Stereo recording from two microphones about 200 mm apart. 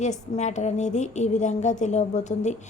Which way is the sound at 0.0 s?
35° left (ahead or behind).